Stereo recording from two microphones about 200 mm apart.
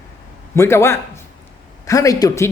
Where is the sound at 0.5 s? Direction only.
15° left (ahead or behind).